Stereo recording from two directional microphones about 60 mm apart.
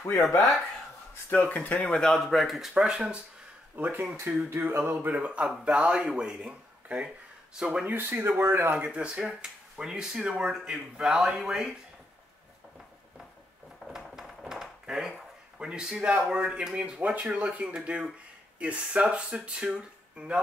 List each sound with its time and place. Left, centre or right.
0.1 s speech: left
1.3 s speech: left
1.9 s speech: centre
3.7 s speech: right
4.5 s speech: right
5.1 s speech: right
8.0 s speech: right
8.6 s speech: right
13.8 s speech: centre